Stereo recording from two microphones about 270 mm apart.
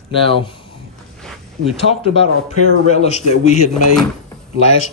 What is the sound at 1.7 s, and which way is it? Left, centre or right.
A man's voice, left.